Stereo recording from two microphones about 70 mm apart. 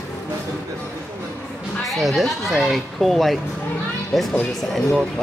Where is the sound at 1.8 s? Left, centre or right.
Centre.